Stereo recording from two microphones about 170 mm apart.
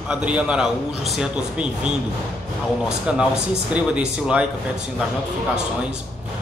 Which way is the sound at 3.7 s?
5° right (ahead or behind).